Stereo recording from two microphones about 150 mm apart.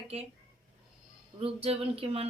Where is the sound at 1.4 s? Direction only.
40° right (ahead or behind).